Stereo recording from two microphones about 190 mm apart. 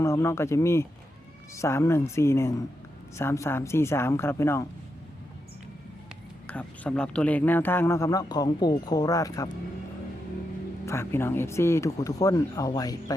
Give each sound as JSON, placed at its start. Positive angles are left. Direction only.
{"t": 0.0, "sound": "speech", "side_deg": 15}
{"t": 6.5, "sound": "speech", "side_deg": 5}
{"t": 10.8, "sound": "speech", "side_deg": 15}